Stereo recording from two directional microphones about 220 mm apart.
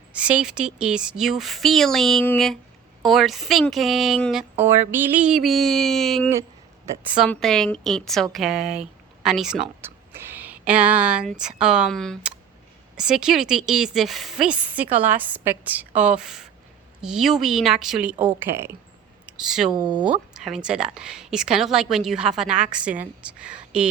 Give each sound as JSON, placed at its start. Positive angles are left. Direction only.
{"t": 0.1, "sound": "speech", "side_deg": -5}
{"t": 19.7, "sound": "speech", "side_deg": -20}
{"t": 20.1, "sound": "speech", "side_deg": 0}